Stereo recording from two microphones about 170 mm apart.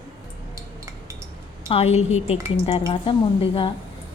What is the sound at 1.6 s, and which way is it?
A woman's voice, 35° left (ahead or behind).